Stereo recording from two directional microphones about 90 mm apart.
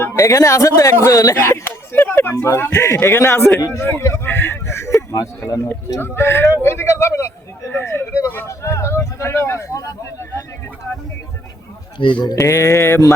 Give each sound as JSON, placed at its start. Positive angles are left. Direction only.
{"t": 0.2, "sound": "speech", "side_deg": 35}
{"t": 1.4, "sound": "a man's voice", "side_deg": 25}
{"t": 3.7, "sound": "a sound", "side_deg": 25}
{"t": 5.1, "sound": "speech", "side_deg": 40}
{"t": 6.0, "sound": "a man's voice", "side_deg": 25}
{"t": 12.0, "sound": "speech", "side_deg": 70}
{"t": 12.4, "sound": "speech", "side_deg": 35}